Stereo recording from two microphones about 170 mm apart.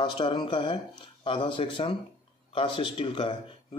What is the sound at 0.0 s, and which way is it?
Speech, 30° left (ahead or behind).